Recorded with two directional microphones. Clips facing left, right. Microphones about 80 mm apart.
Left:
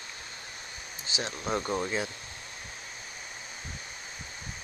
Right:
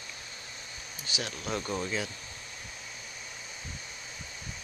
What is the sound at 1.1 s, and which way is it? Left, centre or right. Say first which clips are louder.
Speech: left 3 dB; left.